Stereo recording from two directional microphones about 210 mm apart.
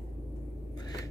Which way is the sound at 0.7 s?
20° left (ahead or behind).